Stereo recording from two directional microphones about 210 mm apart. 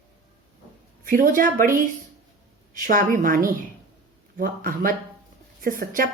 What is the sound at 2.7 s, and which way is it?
A woman's voice, 40° right (ahead or behind).